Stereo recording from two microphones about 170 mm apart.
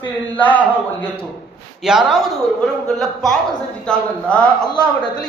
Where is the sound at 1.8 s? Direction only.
Centre (ahead or behind).